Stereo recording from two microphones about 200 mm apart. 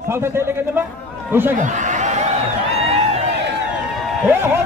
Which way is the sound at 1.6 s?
40° right (ahead or behind).